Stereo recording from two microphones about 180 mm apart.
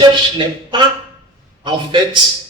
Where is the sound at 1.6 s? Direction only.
25° right (ahead or behind).